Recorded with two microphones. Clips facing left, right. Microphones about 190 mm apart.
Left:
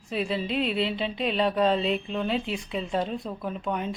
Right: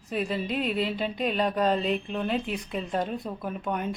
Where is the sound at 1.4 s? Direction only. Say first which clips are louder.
Left 2 dB; centre (ahead or behind).